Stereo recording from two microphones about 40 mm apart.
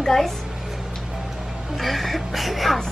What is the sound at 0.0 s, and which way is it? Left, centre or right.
Speech, centre.